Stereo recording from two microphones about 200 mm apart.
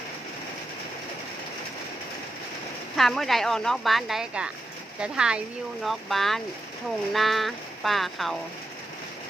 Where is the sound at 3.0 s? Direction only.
Centre (ahead or behind).